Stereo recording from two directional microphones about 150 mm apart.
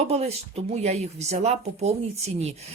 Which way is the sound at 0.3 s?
45° right (ahead or behind).